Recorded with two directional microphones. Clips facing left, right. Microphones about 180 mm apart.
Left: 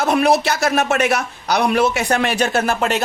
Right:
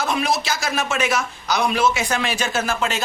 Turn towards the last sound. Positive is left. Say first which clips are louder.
# left 5 dB
turn(degrees=60)  # may be behind; listen again after turning